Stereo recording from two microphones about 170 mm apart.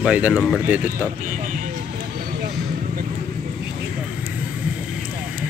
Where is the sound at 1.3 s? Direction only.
50° right (ahead or behind).